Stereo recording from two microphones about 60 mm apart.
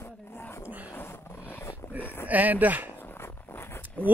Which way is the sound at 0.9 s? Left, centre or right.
Left.